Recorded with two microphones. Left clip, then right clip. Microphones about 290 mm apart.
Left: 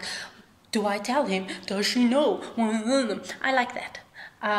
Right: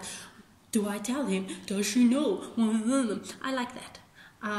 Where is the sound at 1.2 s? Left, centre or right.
Centre.